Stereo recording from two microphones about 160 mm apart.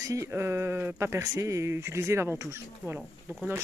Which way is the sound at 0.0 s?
20° right (ahead or behind).